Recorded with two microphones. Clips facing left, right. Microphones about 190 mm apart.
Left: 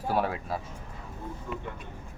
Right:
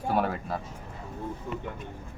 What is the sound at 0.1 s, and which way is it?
Speech, centre (ahead or behind).